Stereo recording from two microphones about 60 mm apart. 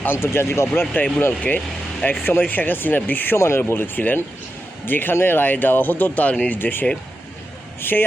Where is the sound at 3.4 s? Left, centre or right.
Left.